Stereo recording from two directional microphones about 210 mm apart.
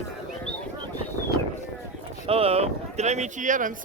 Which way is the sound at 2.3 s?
30° right (ahead or behind).